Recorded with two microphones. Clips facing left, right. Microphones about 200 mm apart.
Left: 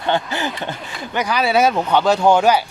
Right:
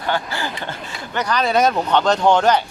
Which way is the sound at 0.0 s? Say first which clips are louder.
Left 3 dB; 20° left (ahead or behind).